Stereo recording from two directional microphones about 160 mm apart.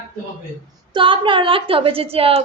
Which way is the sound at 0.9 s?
30° right (ahead or behind).